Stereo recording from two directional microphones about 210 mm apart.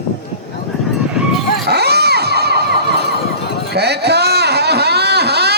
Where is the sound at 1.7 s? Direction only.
50° right (ahead or behind).